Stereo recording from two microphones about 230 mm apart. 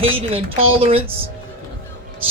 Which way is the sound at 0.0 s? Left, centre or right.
Right.